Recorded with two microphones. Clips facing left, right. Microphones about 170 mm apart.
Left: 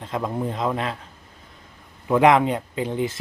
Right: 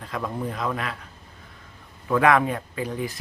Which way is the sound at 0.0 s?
25° left (ahead or behind).